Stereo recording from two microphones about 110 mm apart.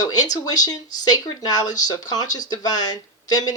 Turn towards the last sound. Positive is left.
turn(degrees=35)  # may be behind; listen again after turning